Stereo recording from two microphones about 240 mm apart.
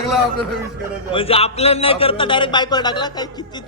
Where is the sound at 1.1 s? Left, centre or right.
Left.